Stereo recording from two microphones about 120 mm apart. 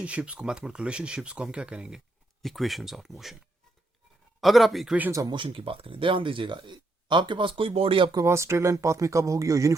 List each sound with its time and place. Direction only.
0.0 s speech: 10° right (ahead or behind)
4.4 s speech: centre (ahead or behind)
5.3 s speech: 45° right (ahead or behind)
8.1 s speech: 25° right (ahead or behind)